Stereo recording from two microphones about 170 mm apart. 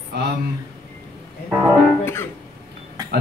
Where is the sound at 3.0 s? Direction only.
25° right (ahead or behind).